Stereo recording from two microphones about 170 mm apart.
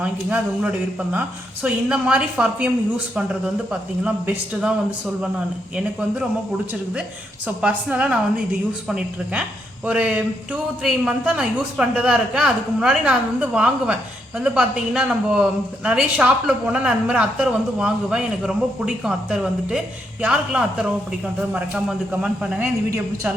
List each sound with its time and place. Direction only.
0.0 s speech: 10° right (ahead or behind)
5.7 s speech: 5° right (ahead or behind)
7.4 s speech: 10° right (ahead or behind)